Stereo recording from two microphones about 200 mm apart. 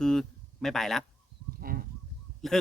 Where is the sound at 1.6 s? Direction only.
45° right (ahead or behind).